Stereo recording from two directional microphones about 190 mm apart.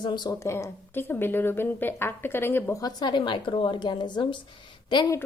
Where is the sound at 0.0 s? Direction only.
25° left (ahead or behind).